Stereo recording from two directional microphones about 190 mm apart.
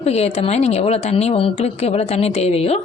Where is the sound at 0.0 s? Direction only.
35° left (ahead or behind).